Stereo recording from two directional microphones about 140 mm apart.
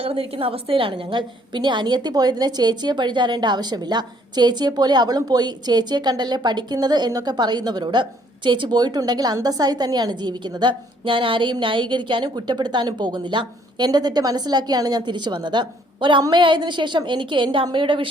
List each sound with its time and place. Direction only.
0.0 s a woman's voice: 45° right (ahead or behind)